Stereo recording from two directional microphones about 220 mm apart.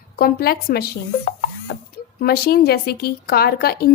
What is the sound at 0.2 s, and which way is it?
A woman's voice, 45° left (ahead or behind).